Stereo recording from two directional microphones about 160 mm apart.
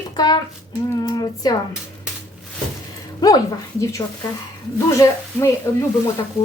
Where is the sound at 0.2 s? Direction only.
25° left (ahead or behind).